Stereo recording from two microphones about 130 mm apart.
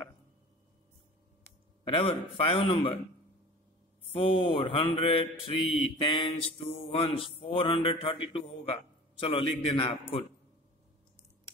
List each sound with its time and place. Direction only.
2.0 s a man's voice: 40° left (ahead or behind)
4.2 s mantra: 40° left (ahead or behind)